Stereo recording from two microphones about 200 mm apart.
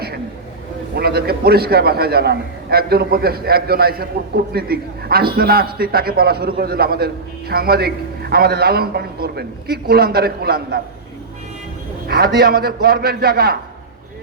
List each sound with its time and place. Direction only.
0.9 s a man's voice: 50° right (ahead or behind)
12.0 s a man's voice: 50° right (ahead or behind)